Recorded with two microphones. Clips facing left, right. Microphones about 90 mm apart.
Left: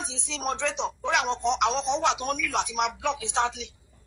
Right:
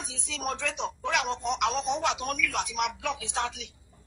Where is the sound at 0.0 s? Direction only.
70° left (ahead or behind).